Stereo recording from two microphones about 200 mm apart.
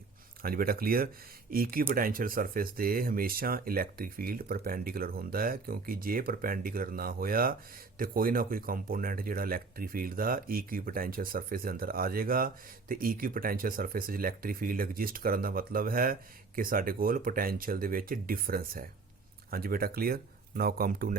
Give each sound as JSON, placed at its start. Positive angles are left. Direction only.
{"t": 0.4, "sound": "speech", "side_deg": -45}